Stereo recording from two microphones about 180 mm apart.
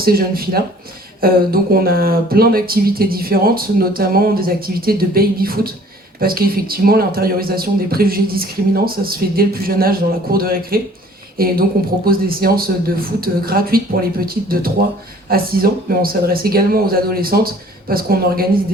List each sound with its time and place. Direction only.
0.0 s speech: 55° right (ahead or behind)